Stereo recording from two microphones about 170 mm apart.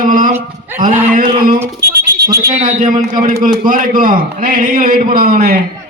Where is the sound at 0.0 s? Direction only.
55° right (ahead or behind).